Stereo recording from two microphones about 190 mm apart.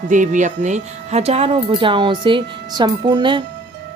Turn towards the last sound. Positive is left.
turn(degrees=-25)  # may be behind; listen again after turning